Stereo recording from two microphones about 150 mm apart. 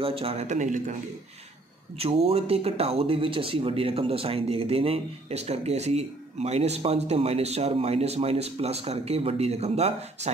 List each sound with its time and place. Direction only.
0.0 s speech: 40° right (ahead or behind); by 0.9 s 55° right (ahead or behind)
2.0 s speech: 40° right (ahead or behind)